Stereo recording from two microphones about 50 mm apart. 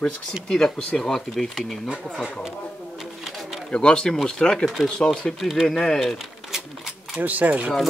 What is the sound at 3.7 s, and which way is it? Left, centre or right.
Speech, centre.